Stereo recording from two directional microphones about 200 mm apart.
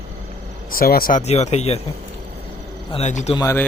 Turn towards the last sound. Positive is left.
turn(degrees=15)  # may be behind; listen again after turning